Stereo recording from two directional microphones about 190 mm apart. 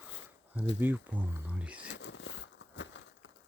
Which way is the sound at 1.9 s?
70° left (ahead or behind).